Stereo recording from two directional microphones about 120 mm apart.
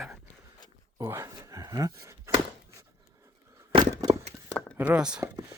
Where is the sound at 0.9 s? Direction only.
25° right (ahead or behind).